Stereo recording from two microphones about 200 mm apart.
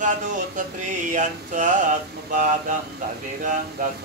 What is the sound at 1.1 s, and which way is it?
Speech, 40° right (ahead or behind).